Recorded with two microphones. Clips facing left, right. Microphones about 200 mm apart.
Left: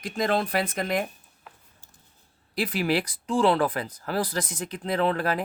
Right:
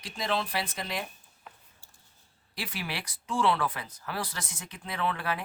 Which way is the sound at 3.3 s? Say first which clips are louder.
Left 6 dB; 35° left (ahead or behind).